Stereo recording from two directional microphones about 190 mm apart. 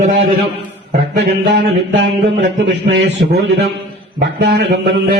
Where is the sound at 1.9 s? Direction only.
75° right (ahead or behind).